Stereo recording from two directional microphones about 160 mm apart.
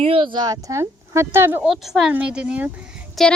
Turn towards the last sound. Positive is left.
turn(degrees=0)  # may be behind; listen again after turning